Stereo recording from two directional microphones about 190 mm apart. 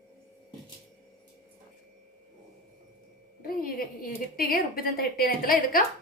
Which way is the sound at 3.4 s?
50° left (ahead or behind).